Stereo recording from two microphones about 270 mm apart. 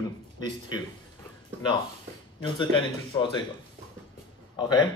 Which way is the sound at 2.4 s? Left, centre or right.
Centre.